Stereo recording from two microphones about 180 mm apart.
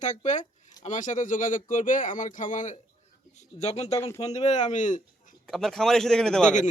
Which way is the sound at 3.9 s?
20° left (ahead or behind).